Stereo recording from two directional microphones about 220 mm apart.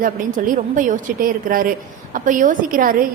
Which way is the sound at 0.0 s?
35° right (ahead or behind).